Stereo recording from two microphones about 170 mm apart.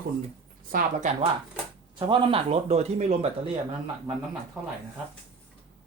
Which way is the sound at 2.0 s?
30° right (ahead or behind).